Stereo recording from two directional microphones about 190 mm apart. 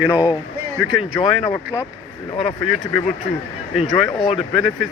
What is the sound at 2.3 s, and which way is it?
Speech, 30° left (ahead or behind).